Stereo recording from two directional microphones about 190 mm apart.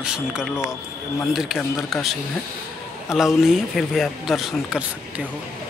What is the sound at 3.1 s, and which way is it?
Speech, centre (ahead or behind).